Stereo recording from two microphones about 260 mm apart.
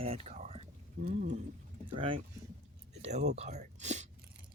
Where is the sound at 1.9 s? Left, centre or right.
Centre.